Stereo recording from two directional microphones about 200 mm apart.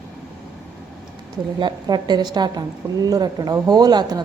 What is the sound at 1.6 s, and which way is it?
A woman's voice, 20° right (ahead or behind).